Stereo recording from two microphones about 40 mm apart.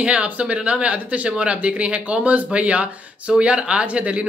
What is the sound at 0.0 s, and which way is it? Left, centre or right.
Speech, right.